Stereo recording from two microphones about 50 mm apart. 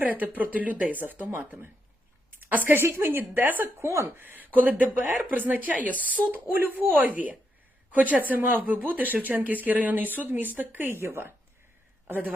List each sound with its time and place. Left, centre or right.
0.0 s speech: right
2.8 s a woman's voice: right
3.8 s speech: right
4.2 s speech: right
5.9 s speech: left
6.1 s a woman's voice: right